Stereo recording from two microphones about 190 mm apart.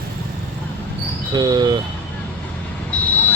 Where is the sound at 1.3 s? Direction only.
20° right (ahead or behind).